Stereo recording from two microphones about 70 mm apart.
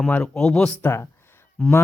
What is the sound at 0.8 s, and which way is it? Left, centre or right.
Speech, left.